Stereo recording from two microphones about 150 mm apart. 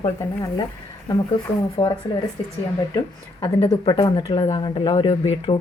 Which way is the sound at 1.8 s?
35° left (ahead or behind).